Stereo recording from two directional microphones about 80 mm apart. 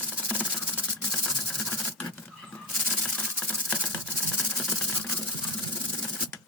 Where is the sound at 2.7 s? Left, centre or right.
Centre.